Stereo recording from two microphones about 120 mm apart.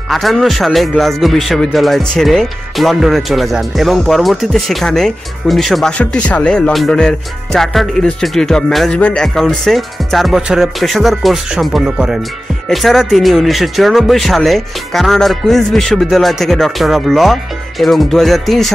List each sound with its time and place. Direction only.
0.1 s speech: centre (ahead or behind)